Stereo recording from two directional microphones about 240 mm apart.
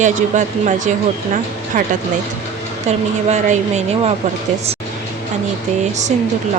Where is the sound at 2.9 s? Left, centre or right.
Right.